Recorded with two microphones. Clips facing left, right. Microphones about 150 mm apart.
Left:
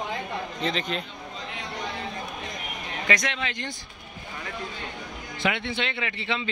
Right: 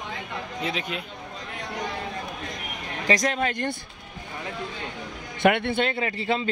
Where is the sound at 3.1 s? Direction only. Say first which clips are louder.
Right 5 dB; 40° right (ahead or behind).